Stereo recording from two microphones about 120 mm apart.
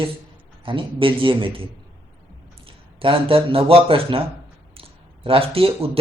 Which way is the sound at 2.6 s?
50° right (ahead or behind).